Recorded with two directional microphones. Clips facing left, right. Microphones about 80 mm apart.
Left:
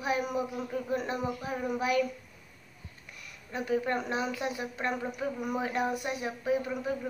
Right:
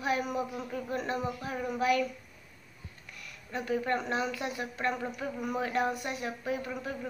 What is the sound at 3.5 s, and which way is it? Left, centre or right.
A man's voice, centre.